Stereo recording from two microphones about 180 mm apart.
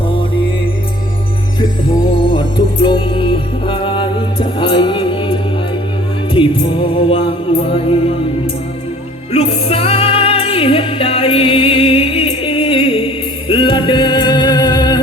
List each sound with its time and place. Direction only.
0.1 s music: 30° left (ahead or behind)
2.8 s music: 25° left (ahead or behind)
9.3 s music: 35° left (ahead or behind)